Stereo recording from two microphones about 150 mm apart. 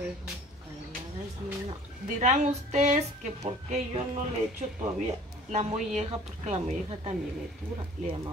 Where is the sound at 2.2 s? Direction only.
50° right (ahead or behind).